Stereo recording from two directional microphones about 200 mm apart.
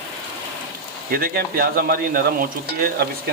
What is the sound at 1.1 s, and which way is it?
Speech, 50° right (ahead or behind).